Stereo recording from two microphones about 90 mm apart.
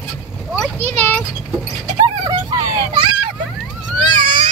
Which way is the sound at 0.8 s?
15° left (ahead or behind).